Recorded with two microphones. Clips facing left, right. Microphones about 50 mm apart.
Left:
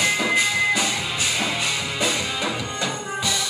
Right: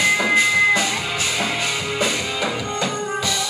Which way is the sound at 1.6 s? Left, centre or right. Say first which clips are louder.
Right 2 dB; right.